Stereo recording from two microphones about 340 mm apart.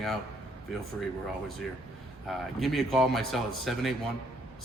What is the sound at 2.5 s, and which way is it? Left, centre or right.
Speech, centre.